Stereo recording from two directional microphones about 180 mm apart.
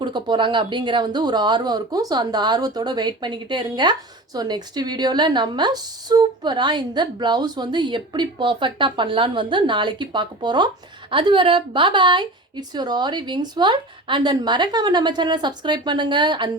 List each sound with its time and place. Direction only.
0.0 s a woman's voice: 25° right (ahead or behind)